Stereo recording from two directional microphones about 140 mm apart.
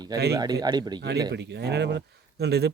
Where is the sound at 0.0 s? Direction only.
30° right (ahead or behind).